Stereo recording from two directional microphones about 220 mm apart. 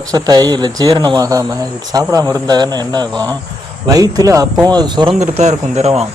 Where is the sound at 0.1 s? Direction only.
15° right (ahead or behind).